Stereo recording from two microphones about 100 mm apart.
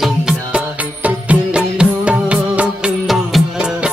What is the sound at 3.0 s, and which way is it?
Music, centre (ahead or behind).